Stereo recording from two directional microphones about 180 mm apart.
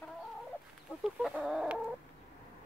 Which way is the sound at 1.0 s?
Centre (ahead or behind).